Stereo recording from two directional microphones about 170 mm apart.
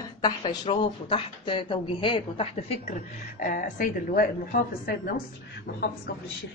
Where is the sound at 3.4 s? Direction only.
50° left (ahead or behind).